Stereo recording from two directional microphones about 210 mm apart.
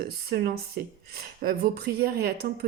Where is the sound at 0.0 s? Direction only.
50° right (ahead or behind).